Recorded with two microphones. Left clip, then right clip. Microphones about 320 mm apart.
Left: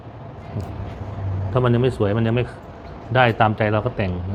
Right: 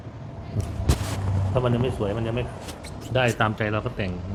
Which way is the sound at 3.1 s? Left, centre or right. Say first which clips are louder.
Left 6 dB; centre.